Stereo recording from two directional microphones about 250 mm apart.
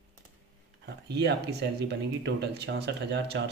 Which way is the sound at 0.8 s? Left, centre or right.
Right.